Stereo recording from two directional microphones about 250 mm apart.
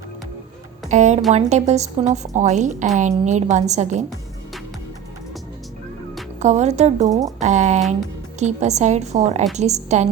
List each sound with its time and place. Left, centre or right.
0.9 s a woman's voice: right
6.4 s a woman's voice: right
7.1 s speech: centre
7.3 s a woman's voice: right